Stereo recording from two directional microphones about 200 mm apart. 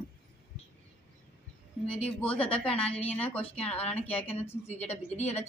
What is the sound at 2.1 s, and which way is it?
Speech, 5° left (ahead or behind).